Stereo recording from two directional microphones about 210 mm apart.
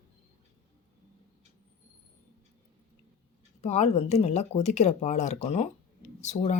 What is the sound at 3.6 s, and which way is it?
Speech, 30° left (ahead or behind).